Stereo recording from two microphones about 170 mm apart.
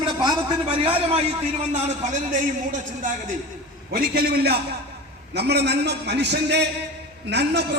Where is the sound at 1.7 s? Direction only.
45° right (ahead or behind).